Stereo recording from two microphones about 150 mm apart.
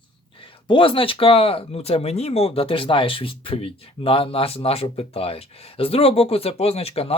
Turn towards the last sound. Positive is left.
turn(degrees=40)  # may be behind; listen again after turning